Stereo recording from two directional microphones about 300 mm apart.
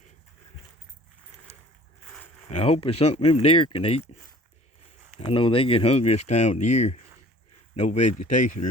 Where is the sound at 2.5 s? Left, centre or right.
Left.